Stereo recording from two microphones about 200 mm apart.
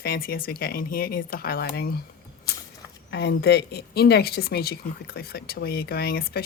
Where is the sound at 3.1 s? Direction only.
55° left (ahead or behind).